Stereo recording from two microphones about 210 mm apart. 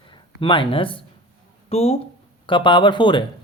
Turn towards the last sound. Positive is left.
turn(degrees=20)  # may be behind; listen again after turning